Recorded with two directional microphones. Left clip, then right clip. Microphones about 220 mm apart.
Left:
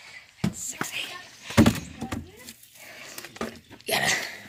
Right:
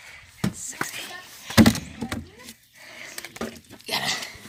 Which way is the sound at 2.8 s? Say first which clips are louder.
Right 3 dB; 10° left (ahead or behind).